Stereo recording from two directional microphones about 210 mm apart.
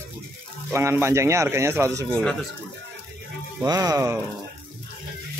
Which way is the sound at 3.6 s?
20° right (ahead or behind).